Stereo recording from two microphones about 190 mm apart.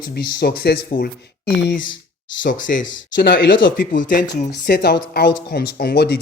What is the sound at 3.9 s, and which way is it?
Speech, 45° left (ahead or behind).